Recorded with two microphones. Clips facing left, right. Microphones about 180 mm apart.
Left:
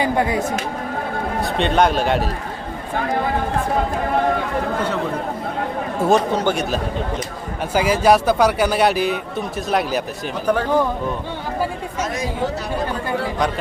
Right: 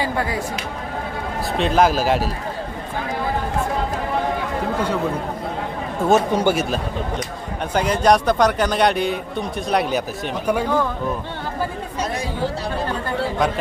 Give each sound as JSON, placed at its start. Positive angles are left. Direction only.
{"t": 0.0, "sound": "speech", "side_deg": 20}
{"t": 1.4, "sound": "speech", "side_deg": 0}
{"t": 6.0, "sound": "speech", "side_deg": 0}
{"t": 7.7, "sound": "speech", "side_deg": 5}
{"t": 10.4, "sound": "speech", "side_deg": -10}